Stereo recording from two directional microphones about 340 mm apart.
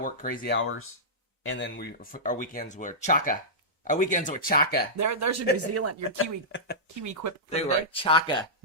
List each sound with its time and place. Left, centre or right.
0.0 s speech: left
4.9 s speech: right
6.5 s speech: left
6.8 s speech: right
7.5 s speech: centre